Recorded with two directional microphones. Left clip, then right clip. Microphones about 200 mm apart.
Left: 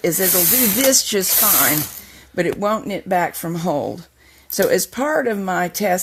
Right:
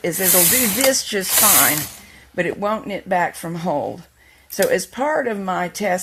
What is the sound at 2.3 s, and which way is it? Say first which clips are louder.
A woman's voice: left 2 dB; 50° left (ahead or behind).